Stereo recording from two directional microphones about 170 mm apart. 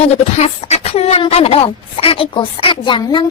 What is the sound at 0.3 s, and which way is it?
Speech, 40° left (ahead or behind).